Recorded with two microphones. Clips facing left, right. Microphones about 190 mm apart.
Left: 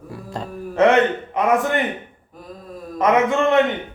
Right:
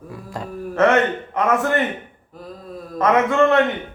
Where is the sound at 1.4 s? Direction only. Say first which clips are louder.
Left 1 dB; 15° left (ahead or behind).